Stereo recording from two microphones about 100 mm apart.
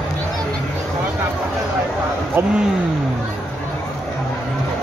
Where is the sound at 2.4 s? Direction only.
20° right (ahead or behind).